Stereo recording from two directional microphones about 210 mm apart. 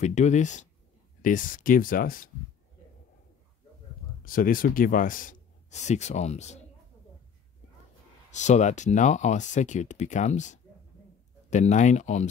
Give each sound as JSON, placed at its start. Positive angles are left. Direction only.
{"t": 0.0, "sound": "speech", "side_deg": 35}
{"t": 4.2, "sound": "speech", "side_deg": 40}
{"t": 8.3, "sound": "speech", "side_deg": 35}